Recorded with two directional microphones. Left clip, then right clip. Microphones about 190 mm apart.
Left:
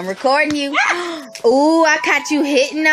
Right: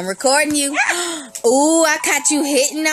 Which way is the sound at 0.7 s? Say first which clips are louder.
Left 4 dB; 10° right (ahead or behind).